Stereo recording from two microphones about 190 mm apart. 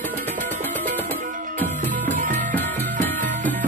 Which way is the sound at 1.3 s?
45° right (ahead or behind).